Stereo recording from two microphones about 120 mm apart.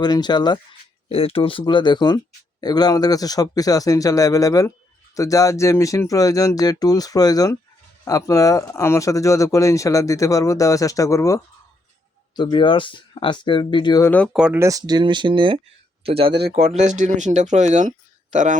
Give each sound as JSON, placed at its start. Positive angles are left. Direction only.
{"t": 0.0, "sound": "speech", "side_deg": 35}
{"t": 1.1, "sound": "speech", "side_deg": 50}
{"t": 12.4, "sound": "speech", "side_deg": 40}
{"t": 14.0, "sound": "speech", "side_deg": 15}
{"t": 14.3, "sound": "speech", "side_deg": -10}
{"t": 14.6, "sound": "speech", "side_deg": -30}